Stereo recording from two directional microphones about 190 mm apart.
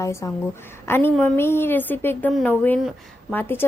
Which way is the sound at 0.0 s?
15° left (ahead or behind).